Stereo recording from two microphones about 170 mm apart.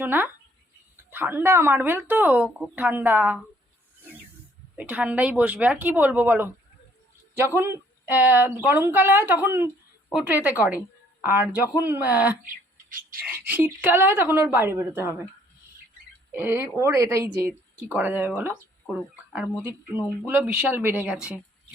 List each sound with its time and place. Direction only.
0.0 s a woman's voice: 10° right (ahead or behind)
4.8 s a woman's voice: 10° right (ahead or behind)
13.4 s a woman's voice: 10° right (ahead or behind)
16.3 s a woman's voice: 10° right (ahead or behind)
20.2 s a woman's voice: 10° right (ahead or behind)